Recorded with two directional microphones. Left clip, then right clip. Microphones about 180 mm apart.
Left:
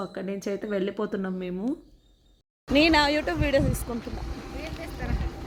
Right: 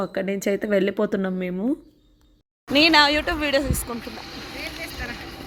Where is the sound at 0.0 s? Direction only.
25° right (ahead or behind).